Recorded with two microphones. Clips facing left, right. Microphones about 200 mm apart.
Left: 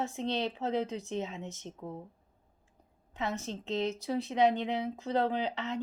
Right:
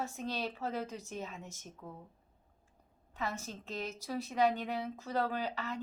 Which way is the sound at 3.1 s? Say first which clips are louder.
Left 4 dB; 20° left (ahead or behind).